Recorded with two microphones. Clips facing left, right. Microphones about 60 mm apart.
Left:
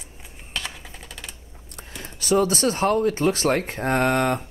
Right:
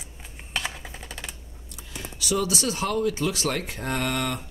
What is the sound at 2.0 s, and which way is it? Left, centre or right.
Speech, left.